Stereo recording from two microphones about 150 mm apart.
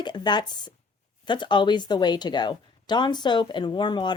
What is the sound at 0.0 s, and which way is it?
A woman's voice, 30° left (ahead or behind).